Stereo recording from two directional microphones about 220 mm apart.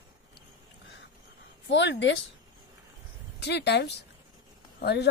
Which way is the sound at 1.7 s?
55° left (ahead or behind).